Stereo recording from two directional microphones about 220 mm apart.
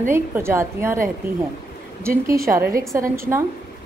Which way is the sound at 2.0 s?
15° right (ahead or behind).